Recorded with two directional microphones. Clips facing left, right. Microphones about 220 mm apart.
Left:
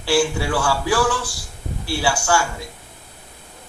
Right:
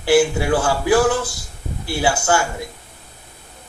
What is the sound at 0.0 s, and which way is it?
A man's voice, 20° right (ahead or behind).